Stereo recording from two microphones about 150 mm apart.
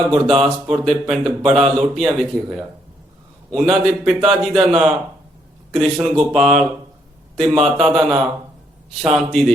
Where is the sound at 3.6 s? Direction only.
Centre (ahead or behind).